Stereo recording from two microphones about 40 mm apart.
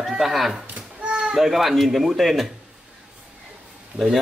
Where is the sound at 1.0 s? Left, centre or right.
Right.